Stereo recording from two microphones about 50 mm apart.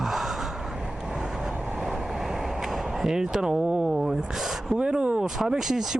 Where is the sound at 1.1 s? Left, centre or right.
Centre.